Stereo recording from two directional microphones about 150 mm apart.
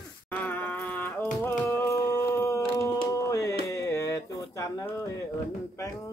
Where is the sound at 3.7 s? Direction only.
20° left (ahead or behind).